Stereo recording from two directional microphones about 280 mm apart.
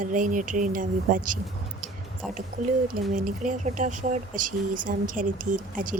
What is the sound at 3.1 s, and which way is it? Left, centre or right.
Speech, right.